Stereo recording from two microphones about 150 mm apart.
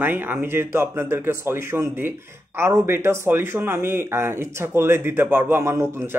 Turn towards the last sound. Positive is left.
turn(degrees=-15)  # may be behind; listen again after turning